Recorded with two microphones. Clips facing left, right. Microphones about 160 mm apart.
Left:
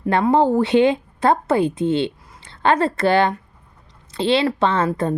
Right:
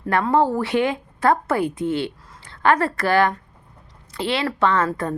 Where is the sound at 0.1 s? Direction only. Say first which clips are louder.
Left 3 dB; 20° left (ahead or behind).